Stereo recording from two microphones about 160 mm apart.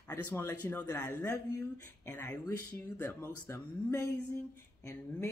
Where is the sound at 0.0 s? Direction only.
10° left (ahead or behind).